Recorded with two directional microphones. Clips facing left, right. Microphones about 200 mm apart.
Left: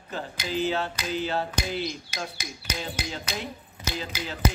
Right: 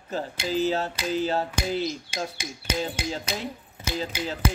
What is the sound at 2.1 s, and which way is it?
Speech, 25° right (ahead or behind).